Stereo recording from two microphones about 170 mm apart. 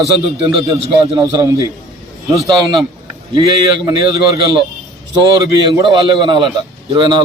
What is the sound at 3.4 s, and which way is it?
A man's voice, 25° right (ahead or behind).